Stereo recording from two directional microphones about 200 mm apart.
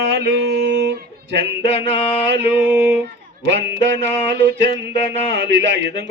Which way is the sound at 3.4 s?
60° right (ahead or behind).